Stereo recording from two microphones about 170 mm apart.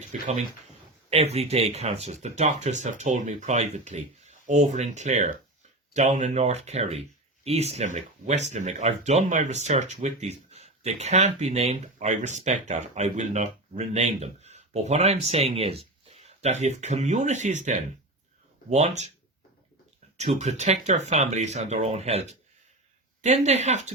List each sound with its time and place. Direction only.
0.1 s speech: 40° right (ahead or behind)
20.1 s speech: 40° right (ahead or behind)